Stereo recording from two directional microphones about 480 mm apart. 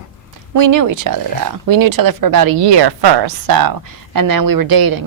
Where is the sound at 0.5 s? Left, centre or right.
Right.